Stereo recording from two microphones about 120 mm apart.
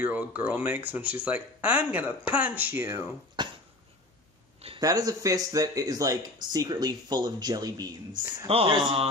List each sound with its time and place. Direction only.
0.0 s speech: 15° right (ahead or behind)
3.4 s dog: 40° right (ahead or behind)
4.7 s speech: 30° right (ahead or behind)
8.5 s speech: 50° right (ahead or behind)